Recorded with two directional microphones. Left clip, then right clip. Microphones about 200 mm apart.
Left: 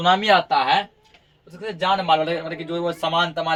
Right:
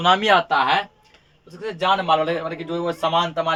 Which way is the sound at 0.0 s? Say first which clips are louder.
Even; 25° right (ahead or behind).